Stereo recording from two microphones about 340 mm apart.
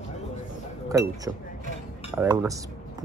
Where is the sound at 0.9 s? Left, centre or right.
Centre.